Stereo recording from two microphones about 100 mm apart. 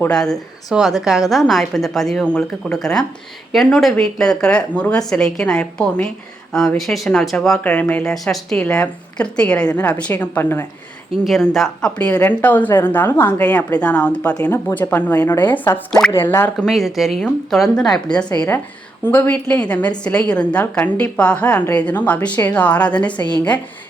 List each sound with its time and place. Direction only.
0.1 s a woman's voice: 5° left (ahead or behind)
7.6 s a woman's voice: 15° left (ahead or behind)
8.1 s a woman's voice: 5° left (ahead or behind); by 10.7 s 20° left (ahead or behind)
11.2 s a woman's voice: centre (ahead or behind); by 15.8 s 20° left (ahead or behind)
15.9 s a woman's voice: 5° left (ahead or behind)
16.1 s speech: 25° left (ahead or behind)
16.6 s speech: centre (ahead or behind)
19.1 s a woman's voice: 20° left (ahead or behind)